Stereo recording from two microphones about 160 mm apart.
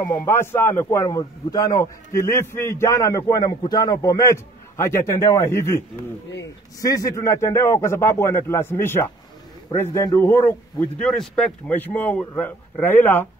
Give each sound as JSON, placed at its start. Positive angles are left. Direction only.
{"t": 0.0, "sound": "a man's voice", "side_deg": 20}
{"t": 6.8, "sound": "a man's voice", "side_deg": 20}